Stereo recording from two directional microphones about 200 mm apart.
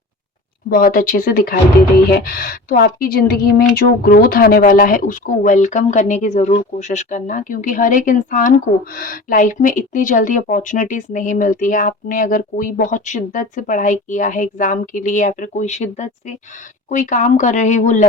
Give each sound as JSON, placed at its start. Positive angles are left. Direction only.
{"t": 0.7, "sound": "speech", "side_deg": 45}